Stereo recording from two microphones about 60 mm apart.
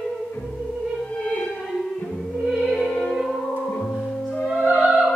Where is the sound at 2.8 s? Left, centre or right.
Left.